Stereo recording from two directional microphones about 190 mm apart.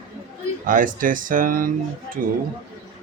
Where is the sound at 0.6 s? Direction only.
45° right (ahead or behind).